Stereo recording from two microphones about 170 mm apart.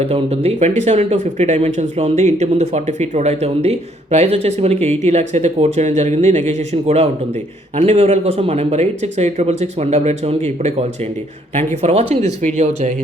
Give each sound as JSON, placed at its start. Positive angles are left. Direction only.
{"t": 0.0, "sound": "speech", "side_deg": -35}